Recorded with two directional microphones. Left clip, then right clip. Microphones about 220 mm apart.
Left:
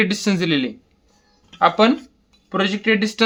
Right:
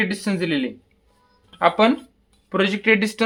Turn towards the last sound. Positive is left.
turn(degrees=0)  # may be behind; listen again after turning